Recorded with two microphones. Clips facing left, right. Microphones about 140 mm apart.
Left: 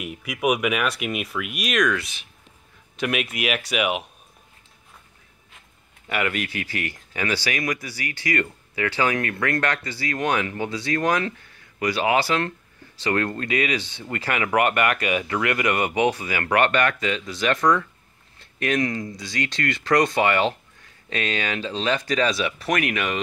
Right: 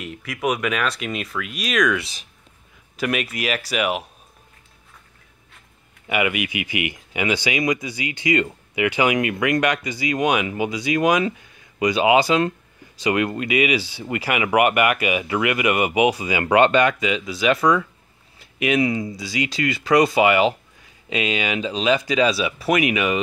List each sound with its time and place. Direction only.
0.0 s speech: 10° left (ahead or behind)
2.0 s speech: 30° right (ahead or behind)
3.0 s speech: centre (ahead or behind)
6.0 s speech: 10° right (ahead or behind)